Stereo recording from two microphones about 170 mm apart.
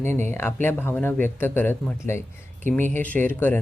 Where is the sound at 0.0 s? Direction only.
45° right (ahead or behind).